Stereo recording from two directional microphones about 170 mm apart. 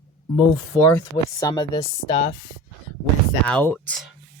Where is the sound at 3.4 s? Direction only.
10° left (ahead or behind).